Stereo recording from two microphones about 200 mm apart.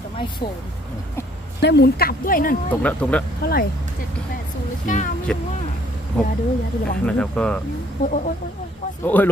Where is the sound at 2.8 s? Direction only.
5° left (ahead or behind).